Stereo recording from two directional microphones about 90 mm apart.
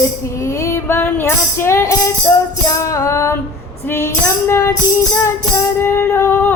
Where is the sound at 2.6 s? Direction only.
40° left (ahead or behind).